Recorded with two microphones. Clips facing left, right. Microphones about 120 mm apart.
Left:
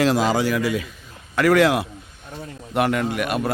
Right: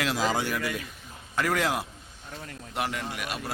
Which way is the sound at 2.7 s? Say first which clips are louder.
Left 11 dB; 60° left (ahead or behind).